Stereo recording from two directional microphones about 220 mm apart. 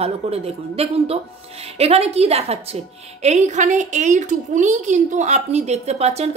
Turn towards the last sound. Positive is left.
turn(degrees=-30)  # may be behind; listen again after turning